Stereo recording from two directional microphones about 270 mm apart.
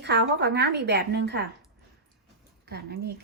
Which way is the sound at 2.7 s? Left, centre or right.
Right.